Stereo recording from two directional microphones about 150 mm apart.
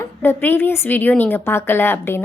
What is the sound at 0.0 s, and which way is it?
A woman's voice, 15° left (ahead or behind).